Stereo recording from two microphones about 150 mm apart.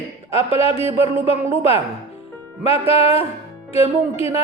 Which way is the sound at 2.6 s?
40° left (ahead or behind).